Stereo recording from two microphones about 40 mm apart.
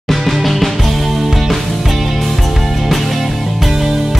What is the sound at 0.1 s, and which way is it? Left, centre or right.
Music, centre.